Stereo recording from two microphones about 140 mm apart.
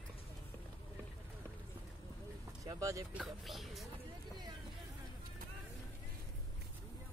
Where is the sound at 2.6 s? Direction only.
25° right (ahead or behind).